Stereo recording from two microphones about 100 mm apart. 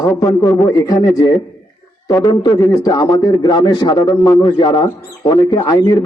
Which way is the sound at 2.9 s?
40° left (ahead or behind).